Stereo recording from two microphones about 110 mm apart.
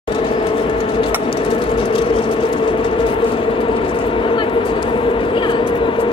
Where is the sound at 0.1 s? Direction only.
50° left (ahead or behind).